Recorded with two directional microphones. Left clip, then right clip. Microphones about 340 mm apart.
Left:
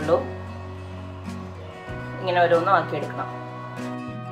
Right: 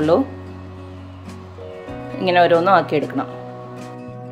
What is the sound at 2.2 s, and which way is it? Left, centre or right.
Speech, right.